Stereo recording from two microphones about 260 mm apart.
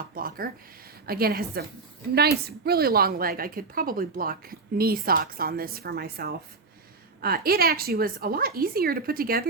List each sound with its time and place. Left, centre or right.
0.1 s speech: right
2.6 s speech: right